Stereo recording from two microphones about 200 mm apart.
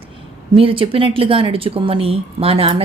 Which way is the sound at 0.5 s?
25° right (ahead or behind).